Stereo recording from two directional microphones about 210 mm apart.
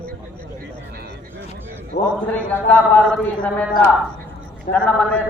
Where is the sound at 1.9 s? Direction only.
50° left (ahead or behind).